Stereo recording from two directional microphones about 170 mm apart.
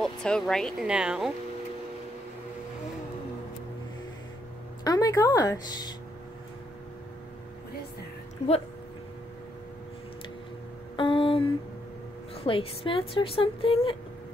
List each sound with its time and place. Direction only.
0.0 s speech: 5° left (ahead or behind)
4.8 s a woman's voice: 20° left (ahead or behind)
11.0 s a sound: 30° left (ahead or behind)
12.4 s a woman's voice: 30° left (ahead or behind)